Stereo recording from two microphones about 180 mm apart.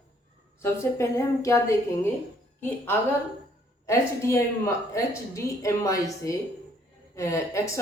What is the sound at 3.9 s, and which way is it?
A woman's voice, 15° left (ahead or behind).